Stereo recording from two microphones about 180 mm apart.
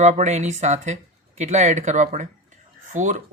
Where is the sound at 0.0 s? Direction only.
40° right (ahead or behind).